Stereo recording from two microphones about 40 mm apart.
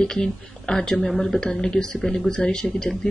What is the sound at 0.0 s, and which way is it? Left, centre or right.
A woman's voice, centre.